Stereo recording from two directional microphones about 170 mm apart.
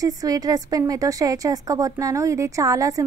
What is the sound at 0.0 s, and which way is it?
A woman's voice, 20° right (ahead or behind).